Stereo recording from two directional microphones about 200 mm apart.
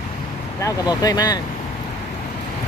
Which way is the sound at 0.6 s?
20° left (ahead or behind).